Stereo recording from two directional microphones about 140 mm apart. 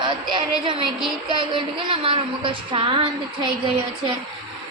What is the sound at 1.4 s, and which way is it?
A woman's voice, 35° right (ahead or behind).